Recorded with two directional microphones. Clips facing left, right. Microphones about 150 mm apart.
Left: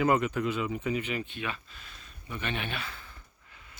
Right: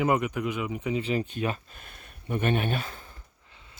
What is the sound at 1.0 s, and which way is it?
Speech, 35° right (ahead or behind).